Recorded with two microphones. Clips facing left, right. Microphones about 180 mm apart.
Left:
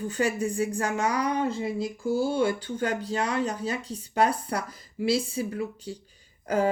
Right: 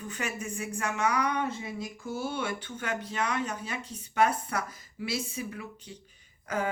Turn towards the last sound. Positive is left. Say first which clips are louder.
# left 7 dB
turn(degrees=35)  # may be behind; listen again after turning